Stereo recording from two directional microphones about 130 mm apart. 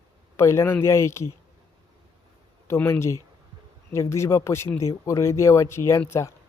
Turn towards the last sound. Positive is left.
turn(degrees=20)  # may be behind; listen again after turning